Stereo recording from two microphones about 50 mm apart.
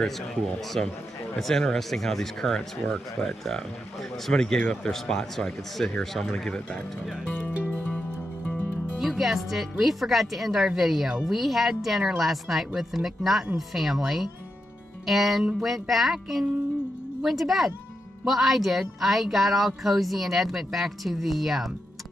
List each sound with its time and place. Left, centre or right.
0.0 s speech: centre
7.6 s music: left
8.5 s music: left
9.0 s speech: centre